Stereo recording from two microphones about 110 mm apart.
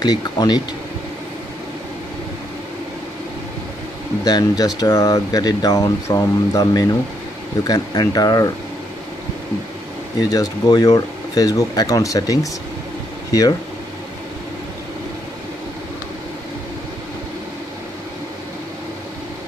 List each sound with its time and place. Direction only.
0.0 s speech: 35° left (ahead or behind)
4.2 s speech: 35° left (ahead or behind)
10.3 s speech: 35° left (ahead or behind)